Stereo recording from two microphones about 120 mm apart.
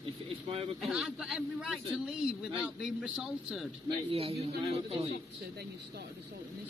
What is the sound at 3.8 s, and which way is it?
Speech, 55° right (ahead or behind).